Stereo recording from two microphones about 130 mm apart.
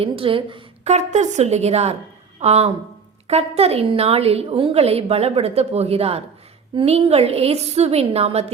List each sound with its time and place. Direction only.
0.0 s a woman's voice: 45° right (ahead or behind)
0.9 s a woman's voice: 60° right (ahead or behind)